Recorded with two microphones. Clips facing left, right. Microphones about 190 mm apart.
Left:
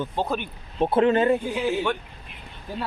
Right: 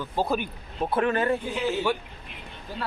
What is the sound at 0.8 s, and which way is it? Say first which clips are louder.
Speech: left 5 dB; 25° left (ahead or behind).